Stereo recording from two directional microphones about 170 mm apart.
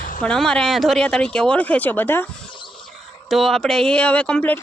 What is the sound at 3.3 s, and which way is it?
Speech, centre (ahead or behind).